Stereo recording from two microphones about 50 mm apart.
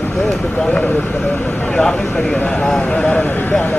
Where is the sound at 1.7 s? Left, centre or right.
Centre.